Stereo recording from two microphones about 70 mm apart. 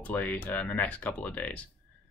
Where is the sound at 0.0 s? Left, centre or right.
Left.